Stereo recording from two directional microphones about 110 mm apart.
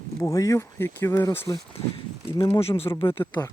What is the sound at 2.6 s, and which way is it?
Speech, 60° left (ahead or behind).